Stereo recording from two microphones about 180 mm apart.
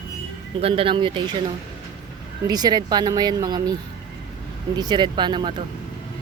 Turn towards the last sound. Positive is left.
turn(degrees=-25)  # may be behind; listen again after turning